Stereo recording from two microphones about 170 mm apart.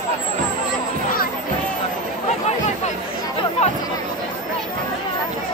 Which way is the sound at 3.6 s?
40° left (ahead or behind).